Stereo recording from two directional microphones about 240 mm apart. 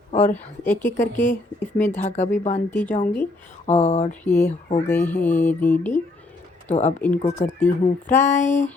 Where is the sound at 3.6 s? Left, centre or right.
Left.